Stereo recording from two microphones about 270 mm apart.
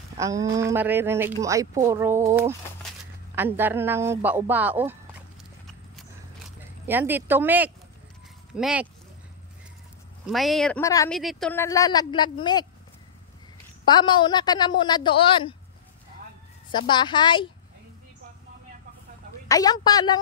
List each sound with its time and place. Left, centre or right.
0.2 s speech: centre
6.9 s speech: centre
10.2 s speech: centre
11.1 s a woman's voice: centre
13.8 s a woman's voice: centre
16.7 s a woman's voice: centre
19.4 s a woman's voice: centre